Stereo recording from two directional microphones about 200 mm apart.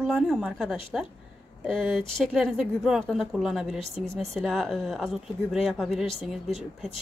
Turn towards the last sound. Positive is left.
turn(degrees=0)  # may be behind; listen again after turning